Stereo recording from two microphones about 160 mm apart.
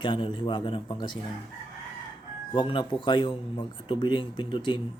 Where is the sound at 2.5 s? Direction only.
30° left (ahead or behind).